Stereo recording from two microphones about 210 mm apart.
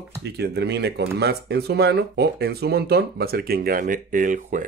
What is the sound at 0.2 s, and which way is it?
Speech, 55° right (ahead or behind).